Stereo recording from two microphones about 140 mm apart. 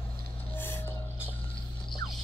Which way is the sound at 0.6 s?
15° left (ahead or behind).